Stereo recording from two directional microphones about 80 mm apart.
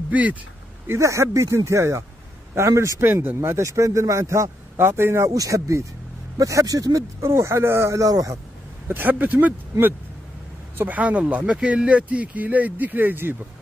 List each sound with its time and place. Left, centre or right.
0.1 s speech: centre
0.8 s a man's voice: right
3.3 s a man's voice: right
5.3 s a man's voice: right
7.2 s a man's voice: right
8.8 s speech: right